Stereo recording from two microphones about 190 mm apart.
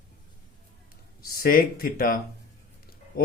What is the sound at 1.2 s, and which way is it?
Speech, 50° left (ahead or behind).